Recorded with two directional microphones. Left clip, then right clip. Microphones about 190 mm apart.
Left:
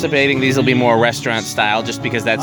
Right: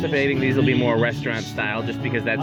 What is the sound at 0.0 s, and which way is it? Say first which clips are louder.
Speech: left 6 dB; 25° left (ahead or behind).